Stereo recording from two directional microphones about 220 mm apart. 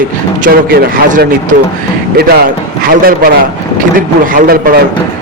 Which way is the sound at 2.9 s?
40° right (ahead or behind).